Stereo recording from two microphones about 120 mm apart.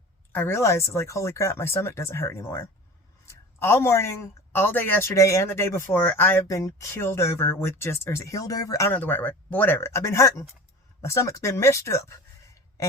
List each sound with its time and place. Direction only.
0.3 s speech: 20° left (ahead or behind)
5.1 s speech: 25° left (ahead or behind)
8.9 s speech: 15° left (ahead or behind)